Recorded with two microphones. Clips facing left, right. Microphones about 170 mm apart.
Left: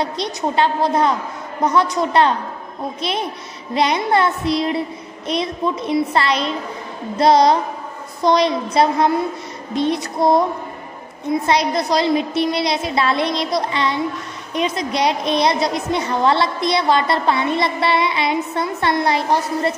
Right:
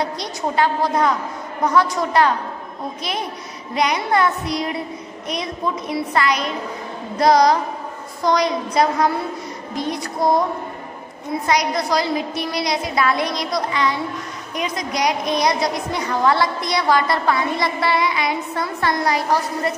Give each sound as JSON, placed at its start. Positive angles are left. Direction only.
{"t": 0.0, "sound": "a woman's voice", "side_deg": 25}
{"t": 3.7, "sound": "a woman's voice", "side_deg": 30}
{"t": 11.4, "sound": "a woman's voice", "side_deg": 25}